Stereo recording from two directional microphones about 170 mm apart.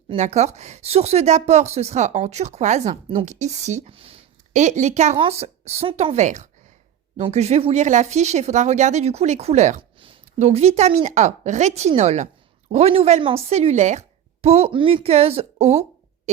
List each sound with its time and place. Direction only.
0.1 s speech: 40° right (ahead or behind)